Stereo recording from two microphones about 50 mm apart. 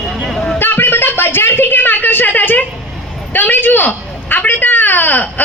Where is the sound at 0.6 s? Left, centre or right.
Left.